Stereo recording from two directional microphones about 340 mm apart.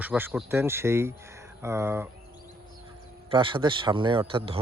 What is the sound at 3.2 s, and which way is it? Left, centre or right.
Speech, centre.